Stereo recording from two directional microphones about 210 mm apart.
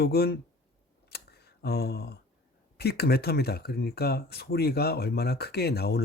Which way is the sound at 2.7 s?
50° left (ahead or behind).